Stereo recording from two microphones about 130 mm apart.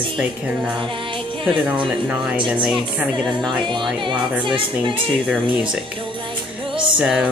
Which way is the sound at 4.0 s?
40° right (ahead or behind).